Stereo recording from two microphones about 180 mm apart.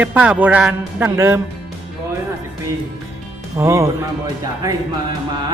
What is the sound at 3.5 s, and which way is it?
A man's voice, 15° right (ahead or behind).